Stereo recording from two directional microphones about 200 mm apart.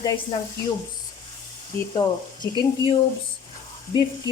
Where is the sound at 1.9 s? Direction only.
20° left (ahead or behind).